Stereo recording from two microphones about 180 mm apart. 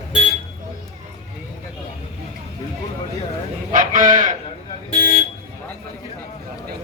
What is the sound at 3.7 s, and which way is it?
Sheep, 45° right (ahead or behind).